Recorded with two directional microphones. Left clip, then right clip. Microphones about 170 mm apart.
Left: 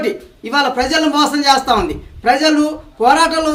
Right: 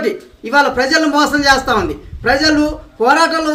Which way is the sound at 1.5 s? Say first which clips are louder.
Left 1 dB; 15° left (ahead or behind).